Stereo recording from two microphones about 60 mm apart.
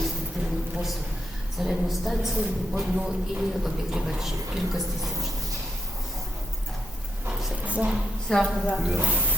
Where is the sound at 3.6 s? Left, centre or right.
Centre.